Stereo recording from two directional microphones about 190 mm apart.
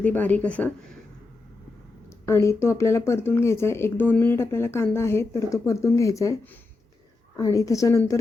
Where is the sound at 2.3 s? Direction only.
15° left (ahead or behind).